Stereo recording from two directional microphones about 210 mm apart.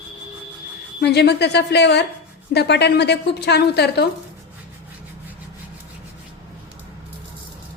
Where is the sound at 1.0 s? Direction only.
50° left (ahead or behind).